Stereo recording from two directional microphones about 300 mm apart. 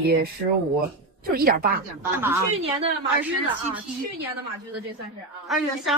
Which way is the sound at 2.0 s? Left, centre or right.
Centre.